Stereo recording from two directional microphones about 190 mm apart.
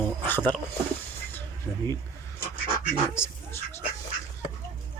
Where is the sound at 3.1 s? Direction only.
15° left (ahead or behind).